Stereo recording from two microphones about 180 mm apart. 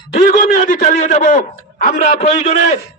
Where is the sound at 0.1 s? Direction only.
40° left (ahead or behind).